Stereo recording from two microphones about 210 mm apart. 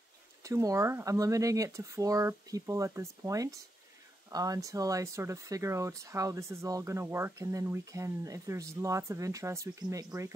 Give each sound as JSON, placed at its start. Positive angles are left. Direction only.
{"t": 0.4, "sound": "speech", "side_deg": -15}